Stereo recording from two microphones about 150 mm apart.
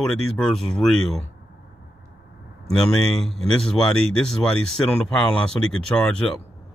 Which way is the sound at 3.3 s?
5° left (ahead or behind).